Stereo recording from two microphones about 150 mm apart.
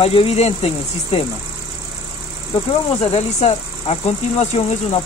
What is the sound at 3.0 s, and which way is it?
Speech, 45° left (ahead or behind).